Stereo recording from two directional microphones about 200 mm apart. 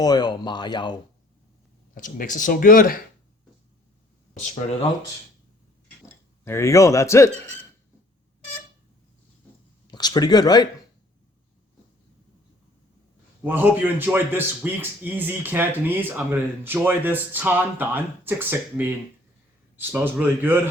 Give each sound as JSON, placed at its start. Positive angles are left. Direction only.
{"t": 0.0, "sound": "speech", "side_deg": 20}
{"t": 2.0, "sound": "speech", "side_deg": 40}
{"t": 6.4, "sound": "a man's voice", "side_deg": 15}
{"t": 9.8, "sound": "speech", "side_deg": 20}
{"t": 13.4, "sound": "a man's voice", "side_deg": -10}